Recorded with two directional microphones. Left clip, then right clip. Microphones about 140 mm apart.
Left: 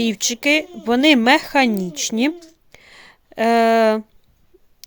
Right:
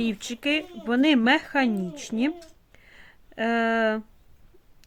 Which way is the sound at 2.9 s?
30° left (ahead or behind).